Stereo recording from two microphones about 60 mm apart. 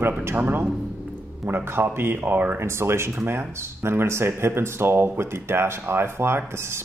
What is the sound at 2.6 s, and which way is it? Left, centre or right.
Speech, right.